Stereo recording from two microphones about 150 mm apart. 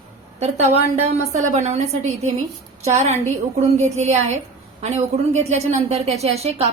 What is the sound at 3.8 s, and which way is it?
A woman's voice, 50° right (ahead or behind).